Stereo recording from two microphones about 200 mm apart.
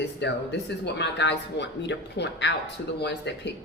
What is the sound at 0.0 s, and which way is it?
Speech, 60° left (ahead or behind).